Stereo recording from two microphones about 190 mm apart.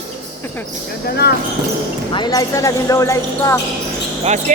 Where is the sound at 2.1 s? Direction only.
20° left (ahead or behind).